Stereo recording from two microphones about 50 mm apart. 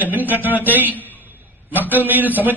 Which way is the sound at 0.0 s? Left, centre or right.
Right.